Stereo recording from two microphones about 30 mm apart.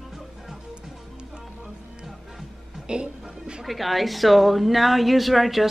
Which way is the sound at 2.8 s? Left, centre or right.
Right.